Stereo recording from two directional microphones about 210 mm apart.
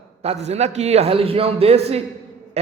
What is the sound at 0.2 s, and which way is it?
A man's voice, 30° right (ahead or behind).